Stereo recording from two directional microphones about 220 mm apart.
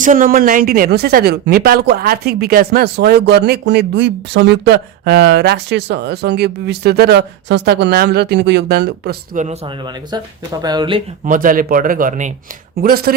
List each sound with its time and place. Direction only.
0.0 s speech: 35° right (ahead or behind)
9.4 s speech: 25° right (ahead or behind)
11.3 s speech: 40° right (ahead or behind)